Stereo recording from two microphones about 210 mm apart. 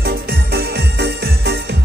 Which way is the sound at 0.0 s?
50° right (ahead or behind).